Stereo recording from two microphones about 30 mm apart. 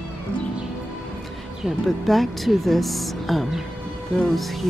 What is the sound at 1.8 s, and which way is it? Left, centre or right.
A woman's voice, centre.